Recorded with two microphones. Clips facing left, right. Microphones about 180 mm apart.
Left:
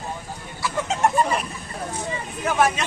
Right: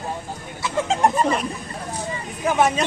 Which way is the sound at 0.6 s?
30° right (ahead or behind).